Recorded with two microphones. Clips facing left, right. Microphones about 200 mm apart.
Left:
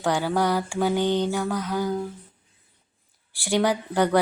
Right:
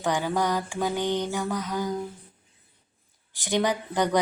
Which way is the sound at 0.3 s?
10° left (ahead or behind).